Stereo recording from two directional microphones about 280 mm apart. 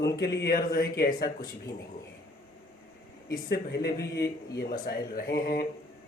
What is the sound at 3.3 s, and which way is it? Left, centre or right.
Speech, left.